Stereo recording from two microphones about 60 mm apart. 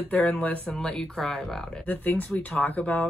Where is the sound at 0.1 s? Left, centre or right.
Left.